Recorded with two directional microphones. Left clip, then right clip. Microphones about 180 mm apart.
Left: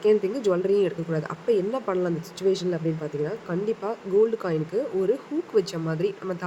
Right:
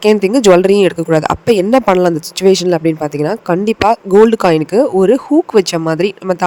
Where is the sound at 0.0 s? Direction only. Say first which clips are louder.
Right 12 dB; 65° right (ahead or behind).